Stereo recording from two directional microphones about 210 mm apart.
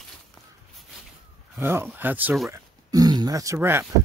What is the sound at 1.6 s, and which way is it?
Speech, 10° right (ahead or behind).